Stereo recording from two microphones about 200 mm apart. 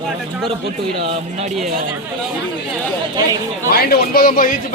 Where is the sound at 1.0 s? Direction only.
30° right (ahead or behind).